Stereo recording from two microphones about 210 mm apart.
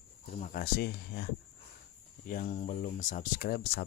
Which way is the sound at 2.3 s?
40° left (ahead or behind).